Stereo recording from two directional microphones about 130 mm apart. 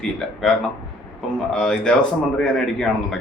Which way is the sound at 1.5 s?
5° left (ahead or behind).